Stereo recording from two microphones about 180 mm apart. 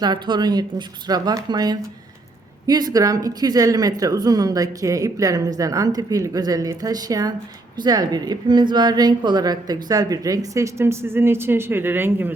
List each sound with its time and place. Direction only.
0.0 s a woman's voice: 25° right (ahead or behind)